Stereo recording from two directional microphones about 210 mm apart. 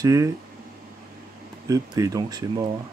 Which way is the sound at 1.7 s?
15° right (ahead or behind).